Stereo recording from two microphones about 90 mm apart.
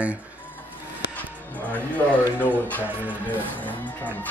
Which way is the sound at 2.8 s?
20° right (ahead or behind).